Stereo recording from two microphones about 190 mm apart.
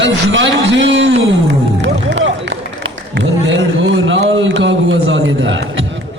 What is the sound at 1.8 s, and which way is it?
Run, 75° right (ahead or behind).